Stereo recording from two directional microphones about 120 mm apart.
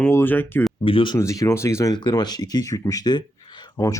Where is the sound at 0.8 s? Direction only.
45° left (ahead or behind).